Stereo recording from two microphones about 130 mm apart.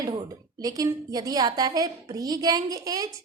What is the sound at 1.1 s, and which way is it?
A woman's voice, 30° right (ahead or behind).